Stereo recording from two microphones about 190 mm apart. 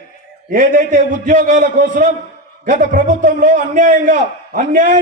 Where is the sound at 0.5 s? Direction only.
45° right (ahead or behind).